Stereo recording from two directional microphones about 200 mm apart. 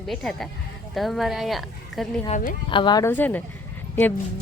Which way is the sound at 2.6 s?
25° left (ahead or behind).